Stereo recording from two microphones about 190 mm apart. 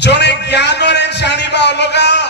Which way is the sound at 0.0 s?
65° left (ahead or behind).